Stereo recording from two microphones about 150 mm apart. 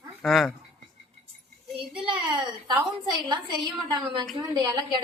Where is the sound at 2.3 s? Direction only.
30° right (ahead or behind).